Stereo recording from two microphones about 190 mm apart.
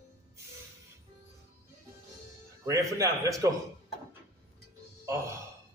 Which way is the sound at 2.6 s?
15° right (ahead or behind).